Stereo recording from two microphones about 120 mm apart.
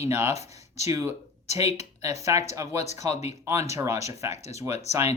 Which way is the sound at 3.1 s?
65° left (ahead or behind).